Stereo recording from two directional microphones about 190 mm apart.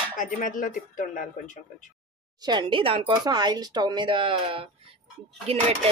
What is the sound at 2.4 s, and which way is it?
Speech, 25° right (ahead or behind).